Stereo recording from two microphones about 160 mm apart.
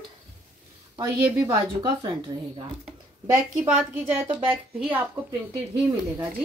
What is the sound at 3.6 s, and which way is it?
Speech, 5° right (ahead or behind).